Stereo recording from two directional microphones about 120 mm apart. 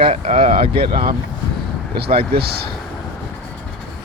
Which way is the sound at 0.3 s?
50° right (ahead or behind).